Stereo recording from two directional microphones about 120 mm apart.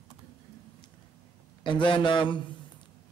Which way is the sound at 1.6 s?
40° left (ahead or behind).